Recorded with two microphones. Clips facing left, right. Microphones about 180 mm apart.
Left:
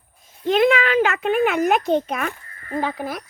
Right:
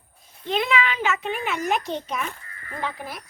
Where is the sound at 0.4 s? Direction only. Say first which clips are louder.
Left 7 dB; 50° left (ahead or behind).